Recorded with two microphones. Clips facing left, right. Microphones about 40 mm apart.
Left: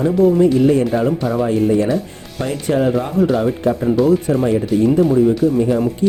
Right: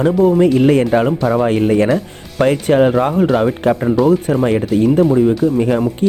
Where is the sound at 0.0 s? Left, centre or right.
Right.